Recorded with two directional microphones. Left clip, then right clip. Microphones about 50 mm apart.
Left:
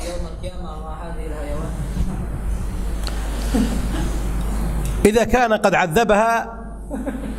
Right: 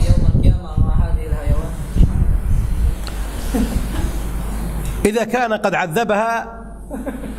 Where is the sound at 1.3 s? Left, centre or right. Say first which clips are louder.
Even; right.